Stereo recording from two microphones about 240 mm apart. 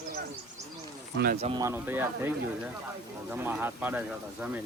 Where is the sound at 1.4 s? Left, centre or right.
Centre.